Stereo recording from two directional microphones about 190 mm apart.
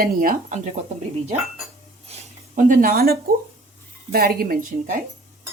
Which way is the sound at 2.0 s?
40° right (ahead or behind).